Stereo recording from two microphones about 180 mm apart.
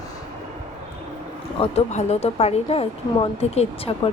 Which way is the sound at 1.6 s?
35° left (ahead or behind).